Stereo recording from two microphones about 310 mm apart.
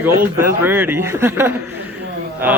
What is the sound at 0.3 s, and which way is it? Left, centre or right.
A man's voice, centre.